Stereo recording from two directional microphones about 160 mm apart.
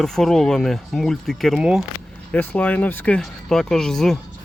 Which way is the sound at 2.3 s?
10° left (ahead or behind).